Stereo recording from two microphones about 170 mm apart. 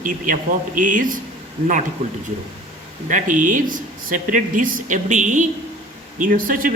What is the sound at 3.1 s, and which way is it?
Speech, 50° right (ahead or behind).